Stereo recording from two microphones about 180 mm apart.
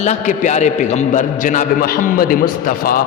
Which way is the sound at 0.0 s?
40° left (ahead or behind).